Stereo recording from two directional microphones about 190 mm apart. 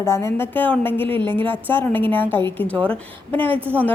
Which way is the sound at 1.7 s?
10° left (ahead or behind).